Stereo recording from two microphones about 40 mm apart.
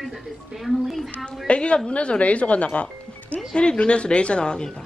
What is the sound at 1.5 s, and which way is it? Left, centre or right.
Speech, left.